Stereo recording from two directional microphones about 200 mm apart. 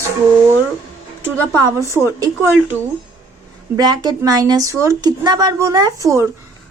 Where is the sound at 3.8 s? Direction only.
20° right (ahead or behind).